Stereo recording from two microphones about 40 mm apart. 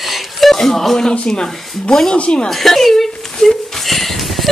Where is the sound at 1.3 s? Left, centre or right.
Centre.